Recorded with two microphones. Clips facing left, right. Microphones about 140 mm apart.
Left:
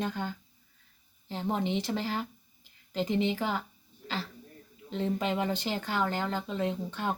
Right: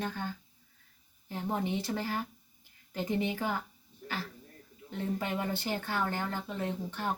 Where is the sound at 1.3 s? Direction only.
20° left (ahead or behind).